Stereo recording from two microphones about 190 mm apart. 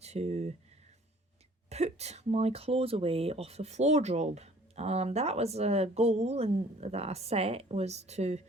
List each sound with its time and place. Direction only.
0.0 s speech: 35° right (ahead or behind)
1.7 s speech: 35° right (ahead or behind)